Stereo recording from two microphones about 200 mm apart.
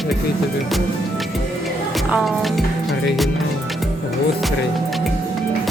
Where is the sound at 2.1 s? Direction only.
Centre (ahead or behind).